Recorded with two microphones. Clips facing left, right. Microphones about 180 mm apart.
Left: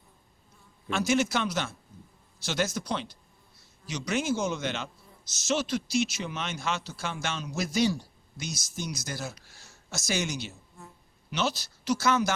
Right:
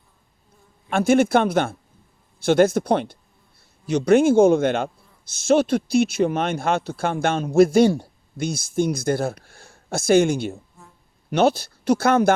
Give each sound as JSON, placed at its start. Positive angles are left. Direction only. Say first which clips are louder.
{"t": 0.9, "sound": "speech", "louder": "right 9 dB", "side_deg": -55}